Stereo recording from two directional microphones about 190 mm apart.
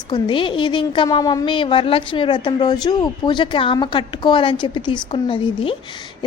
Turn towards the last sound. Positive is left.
turn(degrees=30)  # may be behind; listen again after turning